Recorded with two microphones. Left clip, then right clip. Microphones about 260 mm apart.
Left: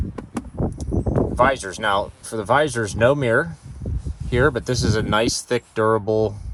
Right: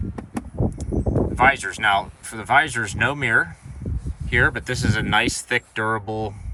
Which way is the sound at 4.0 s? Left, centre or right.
Centre.